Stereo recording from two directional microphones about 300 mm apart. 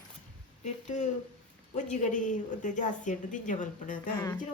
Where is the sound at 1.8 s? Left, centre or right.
Left.